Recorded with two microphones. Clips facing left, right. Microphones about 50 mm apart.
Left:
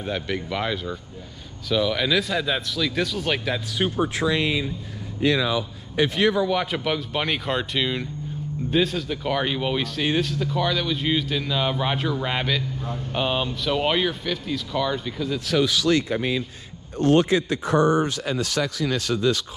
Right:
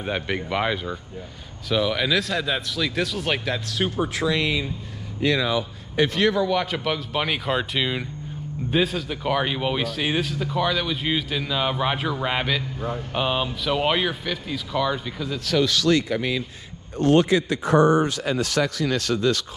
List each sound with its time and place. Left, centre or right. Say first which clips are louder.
0.0 s speech: right 1 dB; centre
3.9 s speech: left 1 dB; left
5.2 s speech: even; right
6.0 s speech: even; centre
17.0 s a man's voice: right 1 dB; right